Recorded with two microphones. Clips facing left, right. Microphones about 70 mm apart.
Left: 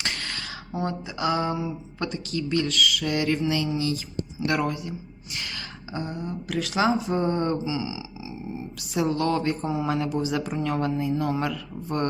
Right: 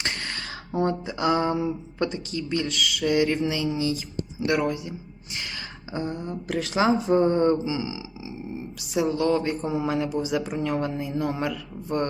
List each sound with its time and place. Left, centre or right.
0.0 s a sound: right
0.8 s speech: right
2.0 s speech: right
8.9 s speech: centre